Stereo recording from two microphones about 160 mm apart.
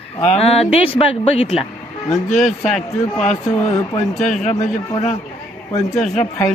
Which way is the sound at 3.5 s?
20° left (ahead or behind).